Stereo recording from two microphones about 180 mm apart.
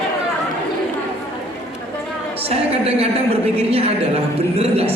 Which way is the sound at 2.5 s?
35° right (ahead or behind).